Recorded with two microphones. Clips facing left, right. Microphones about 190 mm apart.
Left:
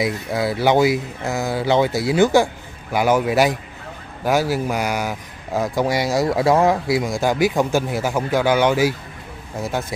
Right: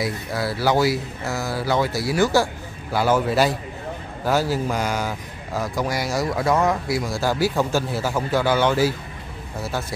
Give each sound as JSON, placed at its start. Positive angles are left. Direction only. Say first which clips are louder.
{"t": 0.0, "sound": "speech", "louder": "left 4 dB", "side_deg": 20}
{"t": 5.5, "sound": "speech", "louder": "left 5 dB", "side_deg": 25}